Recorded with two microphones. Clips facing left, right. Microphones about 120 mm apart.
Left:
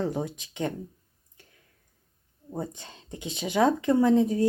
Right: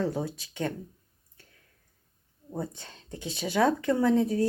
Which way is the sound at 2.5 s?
20° left (ahead or behind).